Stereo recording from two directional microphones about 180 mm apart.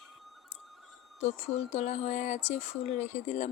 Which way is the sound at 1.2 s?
40° left (ahead or behind).